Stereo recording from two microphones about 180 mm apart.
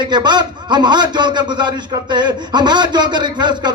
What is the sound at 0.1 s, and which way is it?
A man's voice, 25° right (ahead or behind).